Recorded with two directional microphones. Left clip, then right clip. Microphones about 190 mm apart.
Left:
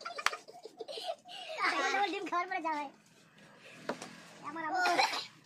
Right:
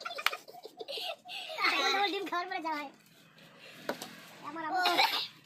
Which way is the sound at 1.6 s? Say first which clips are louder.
Right 2 dB; 10° left (ahead or behind).